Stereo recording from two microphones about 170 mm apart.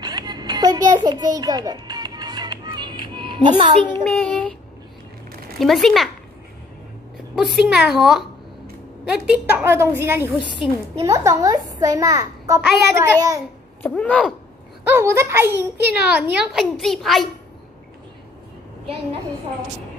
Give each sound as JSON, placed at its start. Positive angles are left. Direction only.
{"t": 0.0, "sound": "music", "side_deg": -25}
{"t": 3.4, "sound": "a child's voice", "side_deg": -30}
{"t": 4.0, "sound": "child singing", "side_deg": 5}
{"t": 5.6, "sound": "a woman's voice", "side_deg": 0}
{"t": 7.3, "sound": "a woman's voice", "side_deg": -5}
{"t": 13.8, "sound": "a sound", "side_deg": 10}
{"t": 14.9, "sound": "a child's voice", "side_deg": -15}